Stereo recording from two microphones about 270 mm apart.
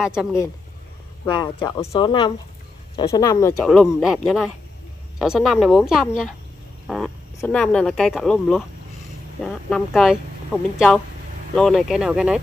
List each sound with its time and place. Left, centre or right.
0.0 s speech: centre
1.2 s speech: centre
7.3 s speech: centre